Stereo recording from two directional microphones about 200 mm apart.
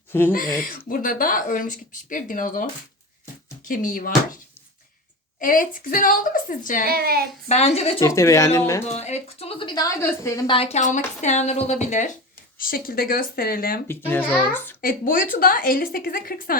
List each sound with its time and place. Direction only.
0.1 s speech: 10° left (ahead or behind)
0.3 s speech: 45° left (ahead or behind)
3.7 s speech: 45° left (ahead or behind)
5.4 s speech: 45° left (ahead or behind)
6.8 s speech: 50° right (ahead or behind)
7.4 s a woman's voice: 35° left (ahead or behind)
7.9 s speech: 15° left (ahead or behind)
8.9 s a woman's voice: 35° left (ahead or behind)
13.8 s speech: 10° left (ahead or behind)
14.8 s speech: 45° left (ahead or behind)